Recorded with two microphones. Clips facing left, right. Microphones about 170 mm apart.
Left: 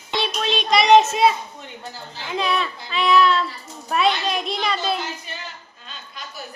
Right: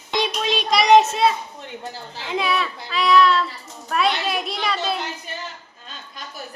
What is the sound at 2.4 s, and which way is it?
A child's voice, centre (ahead or behind).